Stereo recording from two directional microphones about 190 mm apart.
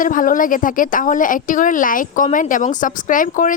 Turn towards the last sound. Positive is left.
turn(degrees=45)  # may be behind; listen again after turning